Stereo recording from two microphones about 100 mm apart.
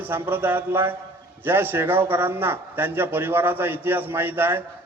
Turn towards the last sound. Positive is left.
turn(degrees=-20)  # may be behind; listen again after turning